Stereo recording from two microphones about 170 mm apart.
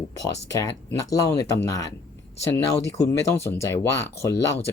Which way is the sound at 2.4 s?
20° left (ahead or behind).